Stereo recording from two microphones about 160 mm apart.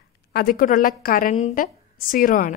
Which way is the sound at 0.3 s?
70° left (ahead or behind).